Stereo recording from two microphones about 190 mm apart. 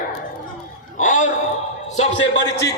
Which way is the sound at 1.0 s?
40° left (ahead or behind).